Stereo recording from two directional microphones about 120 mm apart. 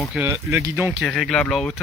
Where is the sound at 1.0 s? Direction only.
5° left (ahead or behind).